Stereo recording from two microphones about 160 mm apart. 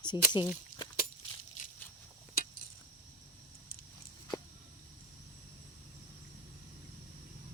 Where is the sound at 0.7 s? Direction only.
50° left (ahead or behind).